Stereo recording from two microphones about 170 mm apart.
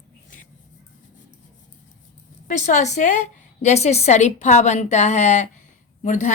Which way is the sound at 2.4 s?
45° left (ahead or behind).